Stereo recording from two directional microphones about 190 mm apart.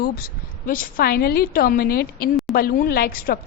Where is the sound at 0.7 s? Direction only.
50° left (ahead or behind).